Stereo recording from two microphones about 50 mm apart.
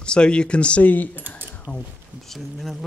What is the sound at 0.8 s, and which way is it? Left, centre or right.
Speech, left.